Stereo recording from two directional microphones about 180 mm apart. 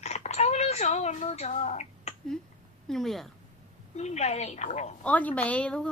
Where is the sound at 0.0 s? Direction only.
40° left (ahead or behind).